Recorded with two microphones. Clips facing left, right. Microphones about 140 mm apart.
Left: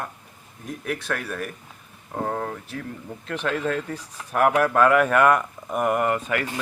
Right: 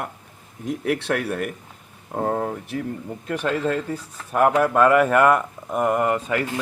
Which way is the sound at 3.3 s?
5° right (ahead or behind).